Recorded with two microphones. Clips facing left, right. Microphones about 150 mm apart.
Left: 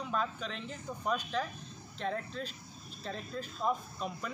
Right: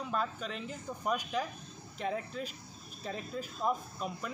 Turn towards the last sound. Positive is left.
turn(degrees=-5)  # may be behind; listen again after turning